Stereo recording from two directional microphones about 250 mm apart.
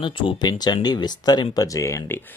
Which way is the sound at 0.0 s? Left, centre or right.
Centre.